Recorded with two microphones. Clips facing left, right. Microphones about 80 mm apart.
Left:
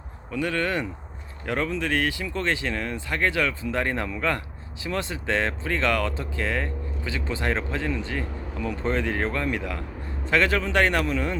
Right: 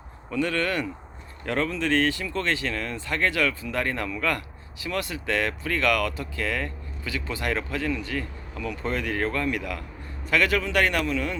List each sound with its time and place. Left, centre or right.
0.3 s a man's voice: centre